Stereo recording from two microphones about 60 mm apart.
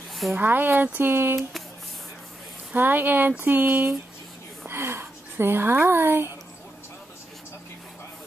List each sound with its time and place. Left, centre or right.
0.3 s speech: right
2.7 s speech: right
4.6 s speech: right